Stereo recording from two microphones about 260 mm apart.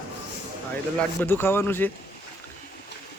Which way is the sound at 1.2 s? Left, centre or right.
Centre.